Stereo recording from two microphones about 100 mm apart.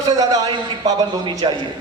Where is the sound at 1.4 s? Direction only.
55° right (ahead or behind).